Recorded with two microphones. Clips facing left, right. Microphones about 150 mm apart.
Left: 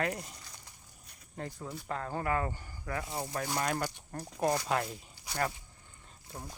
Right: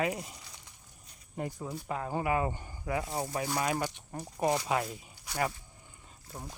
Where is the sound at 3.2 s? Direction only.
10° right (ahead or behind).